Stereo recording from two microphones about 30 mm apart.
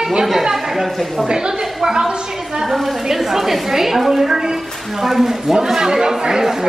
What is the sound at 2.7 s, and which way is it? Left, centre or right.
A woman's voice, centre.